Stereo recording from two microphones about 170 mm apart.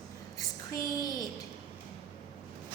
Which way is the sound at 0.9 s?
20° left (ahead or behind).